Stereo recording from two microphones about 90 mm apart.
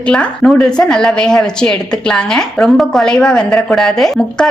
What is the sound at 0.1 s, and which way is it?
A woman's voice, 10° left (ahead or behind).